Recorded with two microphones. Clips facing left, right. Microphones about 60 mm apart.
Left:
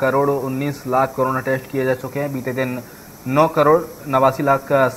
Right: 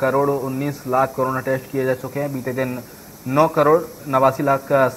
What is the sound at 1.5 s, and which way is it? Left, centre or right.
Speech, left.